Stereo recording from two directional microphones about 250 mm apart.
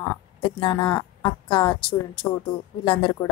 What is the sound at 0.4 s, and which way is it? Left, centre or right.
A woman's voice, centre.